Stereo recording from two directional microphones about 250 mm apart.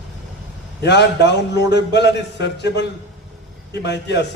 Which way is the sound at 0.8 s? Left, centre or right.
Left.